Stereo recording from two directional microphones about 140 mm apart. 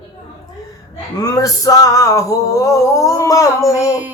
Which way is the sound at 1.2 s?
25° left (ahead or behind).